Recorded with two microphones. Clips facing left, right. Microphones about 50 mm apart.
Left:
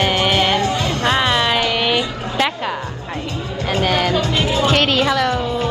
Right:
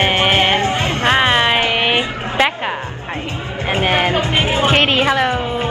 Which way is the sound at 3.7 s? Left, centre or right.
Right.